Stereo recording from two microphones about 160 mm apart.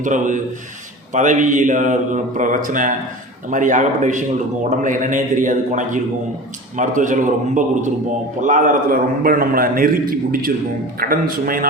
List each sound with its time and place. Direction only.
0.0 s a man's voice: 50° right (ahead or behind)